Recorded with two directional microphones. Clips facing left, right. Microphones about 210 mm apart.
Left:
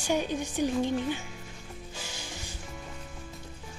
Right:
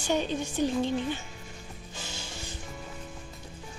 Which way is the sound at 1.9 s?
15° left (ahead or behind).